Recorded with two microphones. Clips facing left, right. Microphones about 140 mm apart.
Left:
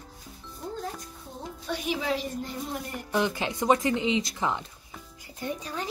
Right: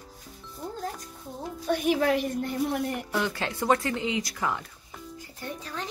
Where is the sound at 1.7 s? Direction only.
50° right (ahead or behind).